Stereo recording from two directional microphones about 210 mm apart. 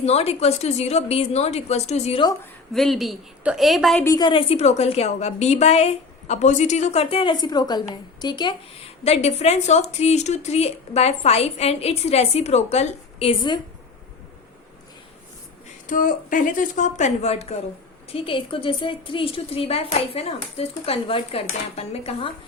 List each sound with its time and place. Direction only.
0.0 s speech: 30° left (ahead or behind)
2.7 s a woman's voice: centre (ahead or behind)
4.0 s a woman's voice: 20° left (ahead or behind)
15.9 s a woman's voice: 40° left (ahead or behind)